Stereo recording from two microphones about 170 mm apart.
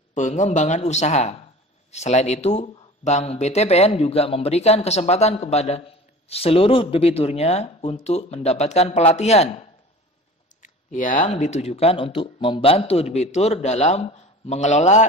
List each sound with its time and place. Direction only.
0.1 s speech: 45° left (ahead or behind)
10.6 s speech: 50° left (ahead or behind)